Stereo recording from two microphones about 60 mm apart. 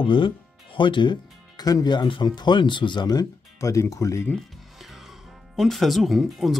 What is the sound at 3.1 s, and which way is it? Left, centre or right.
Speech, left.